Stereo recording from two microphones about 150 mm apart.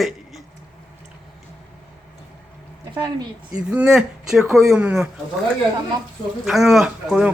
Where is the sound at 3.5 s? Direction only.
10° right (ahead or behind).